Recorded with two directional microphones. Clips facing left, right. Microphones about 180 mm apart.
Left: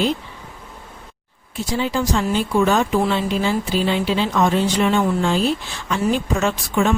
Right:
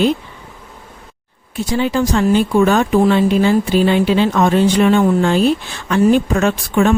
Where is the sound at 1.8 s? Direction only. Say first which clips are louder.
Right 5 dB; 60° right (ahead or behind).